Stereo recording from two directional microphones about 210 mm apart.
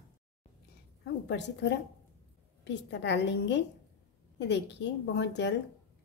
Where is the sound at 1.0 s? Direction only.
55° left (ahead or behind).